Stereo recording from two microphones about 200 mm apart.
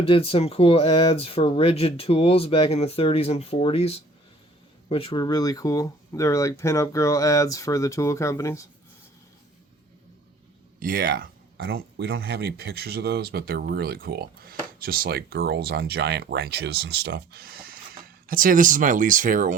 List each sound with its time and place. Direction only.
0.0 s speech: 30° left (ahead or behind)
10.8 s speech: 45° right (ahead or behind)
11.7 s speech: 70° right (ahead or behind); by 19.5 s 40° right (ahead or behind)